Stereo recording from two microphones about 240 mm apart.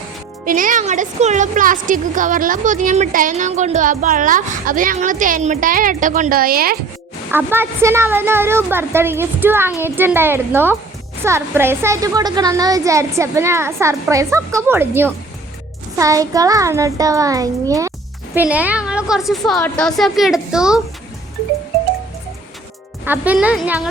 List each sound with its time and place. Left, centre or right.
0.4 s speech: right
7.3 s a woman's voice: centre
23.0 s speech: centre